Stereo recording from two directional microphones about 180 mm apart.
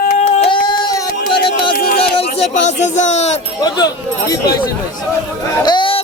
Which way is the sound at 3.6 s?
20° left (ahead or behind).